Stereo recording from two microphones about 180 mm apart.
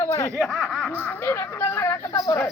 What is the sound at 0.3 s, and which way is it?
Speech, centre (ahead or behind).